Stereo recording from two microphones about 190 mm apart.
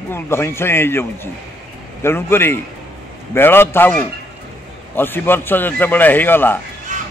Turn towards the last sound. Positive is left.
turn(degrees=-45)  # may be behind; listen again after turning